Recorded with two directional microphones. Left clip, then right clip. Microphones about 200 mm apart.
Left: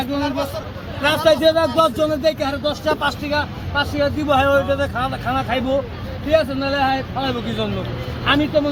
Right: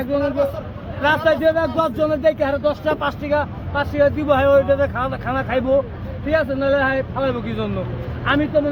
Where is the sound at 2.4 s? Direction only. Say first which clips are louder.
Right 2 dB; 25° right (ahead or behind).